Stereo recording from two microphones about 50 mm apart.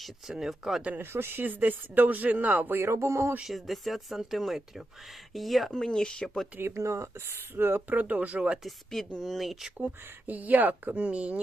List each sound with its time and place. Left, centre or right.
0.0 s speech: centre
0.9 s speech: right
1.5 s speech: right
2.6 s speech: right
3.4 s speech: centre
5.7 s speech: centre
6.6 s speech: right
8.6 s speech: centre
9.7 s speech: right